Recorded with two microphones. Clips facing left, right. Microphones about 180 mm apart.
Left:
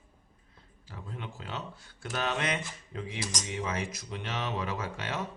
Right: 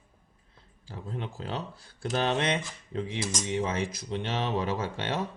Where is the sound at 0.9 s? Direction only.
30° right (ahead or behind).